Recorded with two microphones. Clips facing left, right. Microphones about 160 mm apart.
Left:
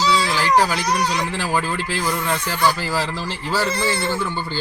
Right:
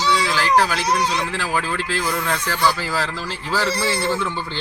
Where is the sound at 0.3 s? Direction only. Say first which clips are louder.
Even; 10° left (ahead or behind).